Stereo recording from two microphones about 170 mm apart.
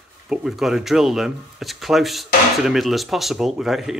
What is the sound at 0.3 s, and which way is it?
Speech, centre (ahead or behind).